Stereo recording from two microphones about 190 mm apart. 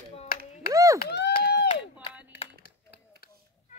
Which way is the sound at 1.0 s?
55° left (ahead or behind).